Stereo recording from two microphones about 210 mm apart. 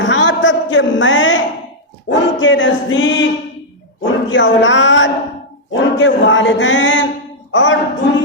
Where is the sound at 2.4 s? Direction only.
60° left (ahead or behind).